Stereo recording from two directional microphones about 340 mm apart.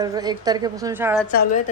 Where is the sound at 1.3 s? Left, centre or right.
Left.